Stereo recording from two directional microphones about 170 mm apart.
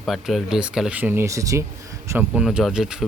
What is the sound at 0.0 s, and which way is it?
Speech, centre (ahead or behind).